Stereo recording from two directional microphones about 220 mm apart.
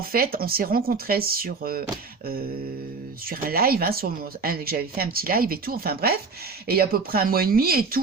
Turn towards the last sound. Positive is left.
turn(degrees=-45)  # may be behind; listen again after turning